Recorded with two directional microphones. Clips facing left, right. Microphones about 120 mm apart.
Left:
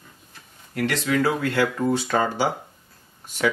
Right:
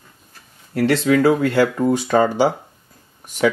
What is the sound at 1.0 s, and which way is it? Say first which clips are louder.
Speech: right 7 dB; 30° right (ahead or behind).